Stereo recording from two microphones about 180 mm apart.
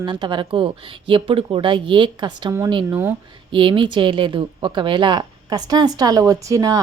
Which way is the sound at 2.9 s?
10° right (ahead or behind).